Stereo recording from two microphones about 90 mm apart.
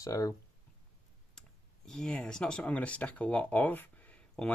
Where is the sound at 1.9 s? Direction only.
5° left (ahead or behind).